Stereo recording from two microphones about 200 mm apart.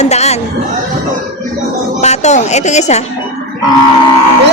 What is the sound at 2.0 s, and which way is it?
A woman's voice, 35° left (ahead or behind).